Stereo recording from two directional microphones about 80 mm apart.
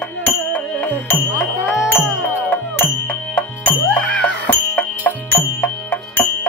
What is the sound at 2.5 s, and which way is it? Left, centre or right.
Music, centre.